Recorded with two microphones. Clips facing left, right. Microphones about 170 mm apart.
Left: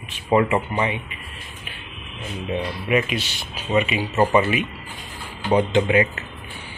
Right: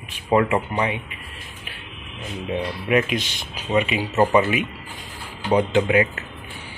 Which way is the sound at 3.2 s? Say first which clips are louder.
Even; 15° right (ahead or behind).